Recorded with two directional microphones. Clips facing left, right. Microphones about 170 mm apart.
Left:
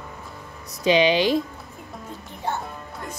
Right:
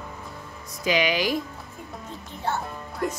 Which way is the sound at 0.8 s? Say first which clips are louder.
Left 5 dB; 25° left (ahead or behind).